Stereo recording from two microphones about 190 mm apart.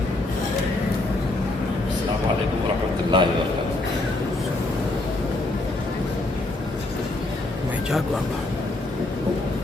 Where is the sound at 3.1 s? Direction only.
25° right (ahead or behind).